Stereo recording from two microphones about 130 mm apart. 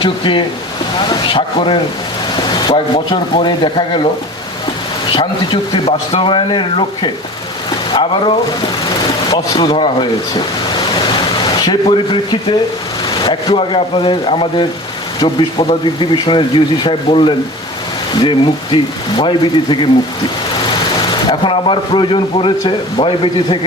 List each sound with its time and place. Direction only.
0.0 s a man's voice: 40° left (ahead or behind)
5.1 s a man's voice: 40° left (ahead or behind)
9.3 s speech: 30° left (ahead or behind)
9.6 s a man's voice: 40° left (ahead or behind)
21.2 s a man's voice: 40° left (ahead or behind)